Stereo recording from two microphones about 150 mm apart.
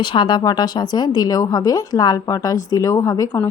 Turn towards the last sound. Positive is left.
turn(degrees=20)  # may be behind; listen again after turning